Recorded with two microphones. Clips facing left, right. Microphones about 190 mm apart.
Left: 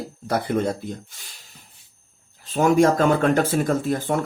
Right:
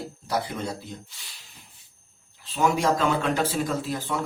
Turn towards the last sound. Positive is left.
turn(degrees=50)  # may be behind; listen again after turning